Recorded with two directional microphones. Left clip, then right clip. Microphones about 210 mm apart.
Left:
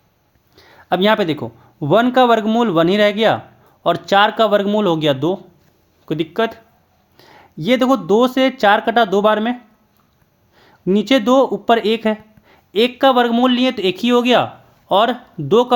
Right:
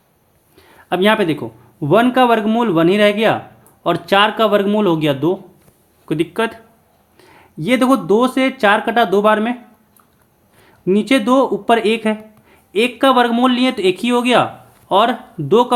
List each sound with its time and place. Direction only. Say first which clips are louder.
0.5 s speech: left 1 dB; 35° left (ahead or behind)
10.6 s speech: right 1 dB; 35° left (ahead or behind)